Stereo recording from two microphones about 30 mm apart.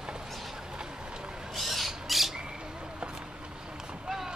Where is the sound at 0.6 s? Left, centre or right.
Right.